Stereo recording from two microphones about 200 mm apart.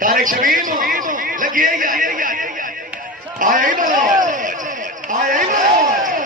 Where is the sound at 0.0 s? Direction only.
45° right (ahead or behind).